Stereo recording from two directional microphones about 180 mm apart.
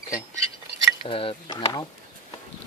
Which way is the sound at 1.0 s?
30° left (ahead or behind).